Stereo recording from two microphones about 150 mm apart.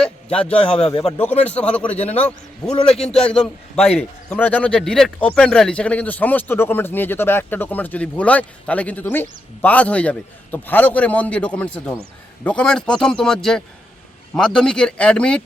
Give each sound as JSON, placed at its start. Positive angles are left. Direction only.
{"t": 0.0, "sound": "a sound", "side_deg": 5}
{"t": 0.8, "sound": "speech", "side_deg": 45}
{"t": 1.5, "sound": "a man's voice", "side_deg": 10}